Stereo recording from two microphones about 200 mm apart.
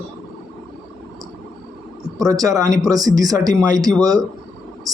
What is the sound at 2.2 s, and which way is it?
Speech, 15° right (ahead or behind).